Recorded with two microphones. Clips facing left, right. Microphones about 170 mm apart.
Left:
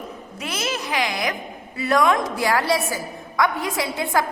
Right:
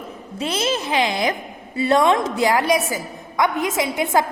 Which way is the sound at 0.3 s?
30° right (ahead or behind).